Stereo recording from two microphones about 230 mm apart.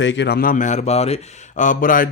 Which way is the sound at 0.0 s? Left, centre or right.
Left.